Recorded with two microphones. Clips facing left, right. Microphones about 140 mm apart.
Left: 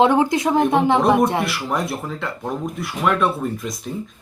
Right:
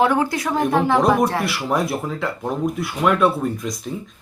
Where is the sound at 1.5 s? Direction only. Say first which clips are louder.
Right 2 dB; centre (ahead or behind).